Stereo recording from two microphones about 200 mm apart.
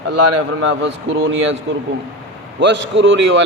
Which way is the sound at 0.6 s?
70° right (ahead or behind).